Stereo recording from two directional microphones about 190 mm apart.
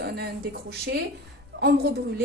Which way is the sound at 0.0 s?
55° right (ahead or behind).